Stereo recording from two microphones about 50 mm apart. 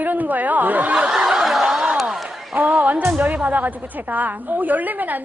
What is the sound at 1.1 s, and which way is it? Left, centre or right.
Snicker, centre.